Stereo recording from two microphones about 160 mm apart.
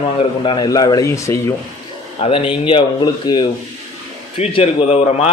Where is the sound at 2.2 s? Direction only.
35° left (ahead or behind).